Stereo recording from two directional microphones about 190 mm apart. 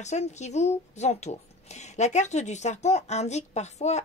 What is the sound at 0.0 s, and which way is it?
Speech, 35° left (ahead or behind).